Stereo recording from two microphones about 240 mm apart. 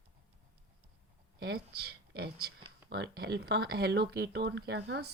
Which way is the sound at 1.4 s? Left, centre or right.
Right.